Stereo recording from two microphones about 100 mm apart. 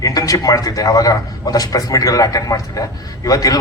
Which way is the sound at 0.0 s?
35° left (ahead or behind).